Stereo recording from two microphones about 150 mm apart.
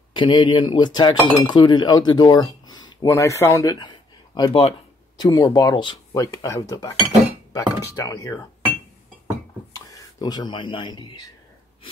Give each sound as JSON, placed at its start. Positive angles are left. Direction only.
{"t": 0.1, "sound": "speech", "side_deg": 30}
{"t": 4.4, "sound": "speech", "side_deg": 35}
{"t": 5.2, "sound": "speech", "side_deg": 25}
{"t": 9.7, "sound": "speech", "side_deg": 25}